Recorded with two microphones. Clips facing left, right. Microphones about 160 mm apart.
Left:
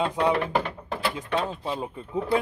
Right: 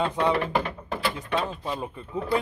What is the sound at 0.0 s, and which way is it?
Speech, 10° left (ahead or behind).